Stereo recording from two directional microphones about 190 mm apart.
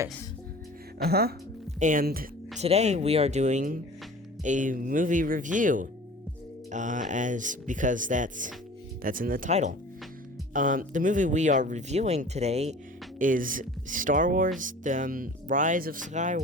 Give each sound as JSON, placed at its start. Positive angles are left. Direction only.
{"t": 1.0, "sound": "speech", "side_deg": -55}
{"t": 2.6, "sound": "speech", "side_deg": -35}